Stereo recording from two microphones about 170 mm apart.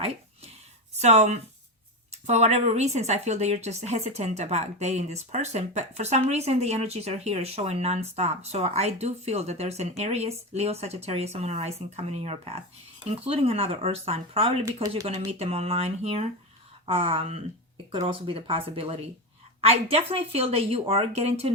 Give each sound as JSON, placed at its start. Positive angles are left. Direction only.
{"t": 0.9, "sound": "a woman's voice", "side_deg": -40}